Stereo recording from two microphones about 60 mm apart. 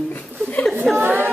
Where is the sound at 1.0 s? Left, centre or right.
Right.